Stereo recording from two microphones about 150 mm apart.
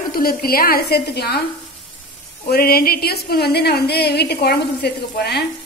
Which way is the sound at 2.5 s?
90° left.